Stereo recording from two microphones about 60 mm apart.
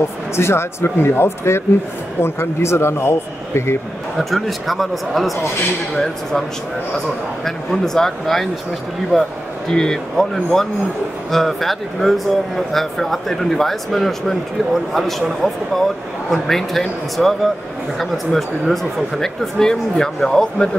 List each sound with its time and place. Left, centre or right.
0.4 s speech: left
4.2 s speech: centre
7.4 s speech: centre